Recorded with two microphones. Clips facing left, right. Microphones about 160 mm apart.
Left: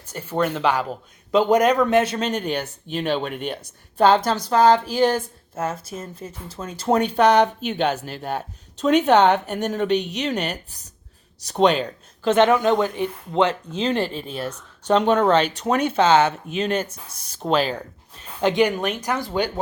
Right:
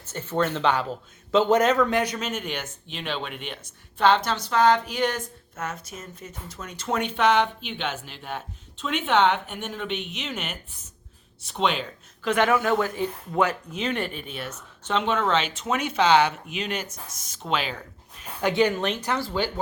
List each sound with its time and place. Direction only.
0.0 s speech: 10° left (ahead or behind); by 11.7 s 40° left (ahead or behind)
11.8 s speech: 30° left (ahead or behind)
18.3 s speech: 20° left (ahead or behind)